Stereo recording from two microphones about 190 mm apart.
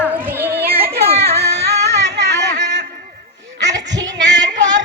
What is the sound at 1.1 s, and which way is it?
Music, 30° right (ahead or behind).